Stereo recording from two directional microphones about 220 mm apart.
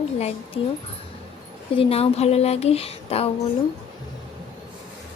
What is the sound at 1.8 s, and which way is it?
Speech, 25° left (ahead or behind).